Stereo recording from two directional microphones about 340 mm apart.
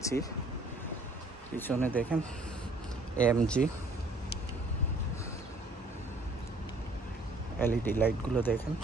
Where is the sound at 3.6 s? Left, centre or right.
Centre.